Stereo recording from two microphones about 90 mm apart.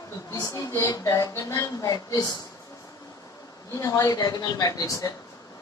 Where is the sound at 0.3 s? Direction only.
45° left (ahead or behind).